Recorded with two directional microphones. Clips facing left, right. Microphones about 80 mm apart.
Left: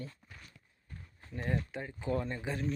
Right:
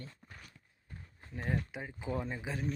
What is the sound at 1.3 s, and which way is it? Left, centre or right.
Speech, centre.